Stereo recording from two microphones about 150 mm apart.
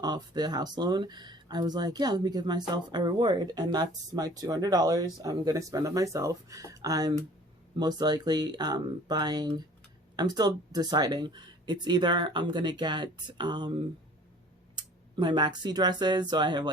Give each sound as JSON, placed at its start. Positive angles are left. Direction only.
{"t": 0.0, "sound": "speech", "side_deg": -30}